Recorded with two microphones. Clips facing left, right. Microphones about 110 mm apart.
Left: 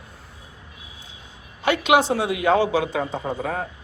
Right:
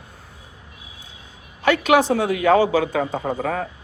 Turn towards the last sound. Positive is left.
turn(degrees=-55)  # may be behind; listen again after turning